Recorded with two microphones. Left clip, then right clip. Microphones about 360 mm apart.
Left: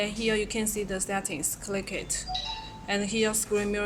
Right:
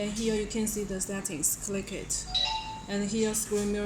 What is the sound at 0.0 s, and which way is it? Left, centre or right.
Speech, left.